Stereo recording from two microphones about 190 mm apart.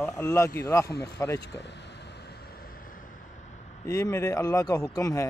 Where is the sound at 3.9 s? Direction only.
15° left (ahead or behind).